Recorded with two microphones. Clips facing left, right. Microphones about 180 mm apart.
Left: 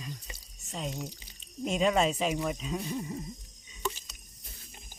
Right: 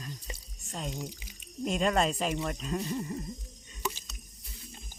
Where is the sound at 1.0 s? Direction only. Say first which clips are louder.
Even; 10° right (ahead or behind).